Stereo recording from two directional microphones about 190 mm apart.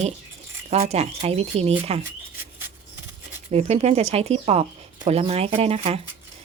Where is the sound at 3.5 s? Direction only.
35° right (ahead or behind).